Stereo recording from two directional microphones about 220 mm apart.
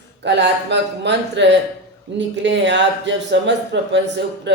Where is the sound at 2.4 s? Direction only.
55° right (ahead or behind).